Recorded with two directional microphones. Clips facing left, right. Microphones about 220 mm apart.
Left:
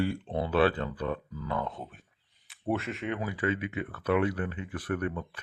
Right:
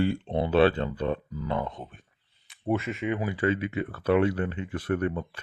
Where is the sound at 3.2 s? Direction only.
25° right (ahead or behind).